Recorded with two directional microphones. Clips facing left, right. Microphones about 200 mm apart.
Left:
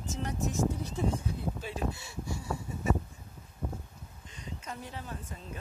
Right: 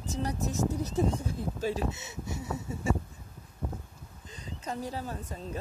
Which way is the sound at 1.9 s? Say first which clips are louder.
Even; 20° right (ahead or behind).